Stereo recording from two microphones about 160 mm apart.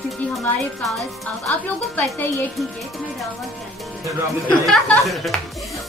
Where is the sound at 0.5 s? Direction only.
Centre (ahead or behind).